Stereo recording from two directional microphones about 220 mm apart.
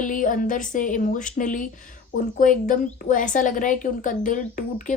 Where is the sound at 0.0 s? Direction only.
35° left (ahead or behind).